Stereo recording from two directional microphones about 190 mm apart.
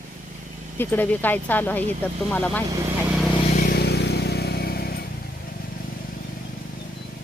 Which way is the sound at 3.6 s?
55° left (ahead or behind).